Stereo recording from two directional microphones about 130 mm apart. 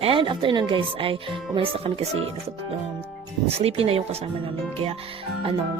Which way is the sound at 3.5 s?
50° right (ahead or behind).